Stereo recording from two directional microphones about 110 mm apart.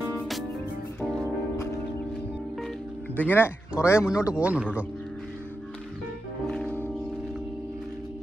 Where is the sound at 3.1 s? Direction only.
15° left (ahead or behind).